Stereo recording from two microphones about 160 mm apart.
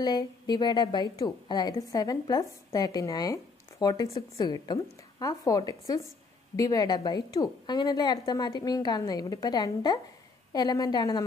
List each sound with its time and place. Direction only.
0.0 s a woman's voice: 25° left (ahead or behind)